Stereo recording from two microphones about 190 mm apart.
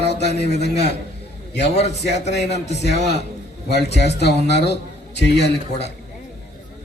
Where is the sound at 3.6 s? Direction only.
60° left (ahead or behind).